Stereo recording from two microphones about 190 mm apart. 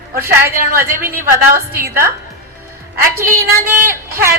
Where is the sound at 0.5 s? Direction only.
50° right (ahead or behind).